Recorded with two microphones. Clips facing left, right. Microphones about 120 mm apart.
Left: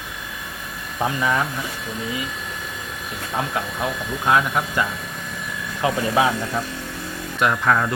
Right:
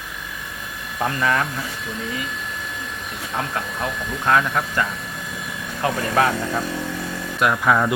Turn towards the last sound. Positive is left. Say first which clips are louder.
# right 1 dB
turn(degrees=-5)  # may be behind; listen again after turning